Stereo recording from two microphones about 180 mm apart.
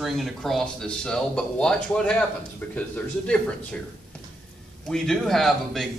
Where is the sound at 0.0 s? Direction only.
Centre (ahead or behind).